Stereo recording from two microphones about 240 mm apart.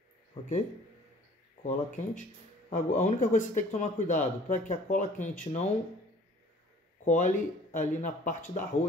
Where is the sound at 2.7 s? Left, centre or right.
Left.